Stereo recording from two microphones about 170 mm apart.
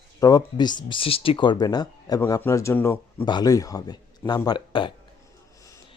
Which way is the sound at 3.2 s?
25° left (ahead or behind).